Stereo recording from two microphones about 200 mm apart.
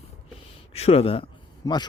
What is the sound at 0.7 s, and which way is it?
Speech, 30° left (ahead or behind).